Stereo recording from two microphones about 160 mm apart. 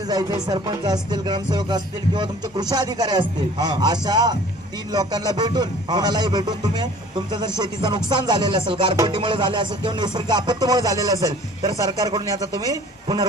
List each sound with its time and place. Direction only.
0.1 s speech: 25° right (ahead or behind)